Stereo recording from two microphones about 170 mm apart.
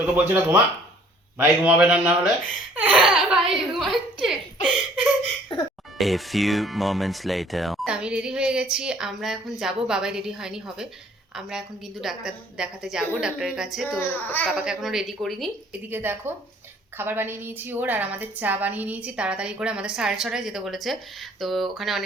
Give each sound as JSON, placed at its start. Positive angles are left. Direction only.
{"t": 0.0, "sound": "a woman's voice", "side_deg": -10}
{"t": 2.7, "sound": "laughter", "side_deg": -10}
{"t": 3.2, "sound": "a sound", "side_deg": 0}
{"t": 5.5, "sound": "music", "side_deg": 30}
{"t": 6.0, "sound": "speech", "side_deg": 0}
{"t": 14.0, "sound": "a child's voice", "side_deg": 10}
{"t": 14.5, "sound": "speech", "side_deg": -5}
{"t": 15.9, "sound": "a woman's voice", "side_deg": -15}